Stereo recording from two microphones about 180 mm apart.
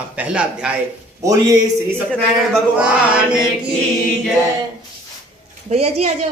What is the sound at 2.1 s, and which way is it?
Speech, 5° left (ahead or behind).